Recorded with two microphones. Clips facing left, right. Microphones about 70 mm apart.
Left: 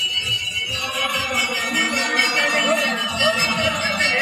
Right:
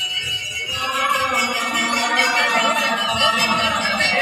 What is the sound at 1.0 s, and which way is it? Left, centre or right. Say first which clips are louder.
Music: right 5 dB; right.